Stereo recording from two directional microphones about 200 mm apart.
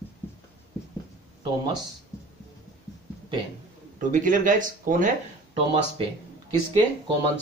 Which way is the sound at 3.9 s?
40° right (ahead or behind).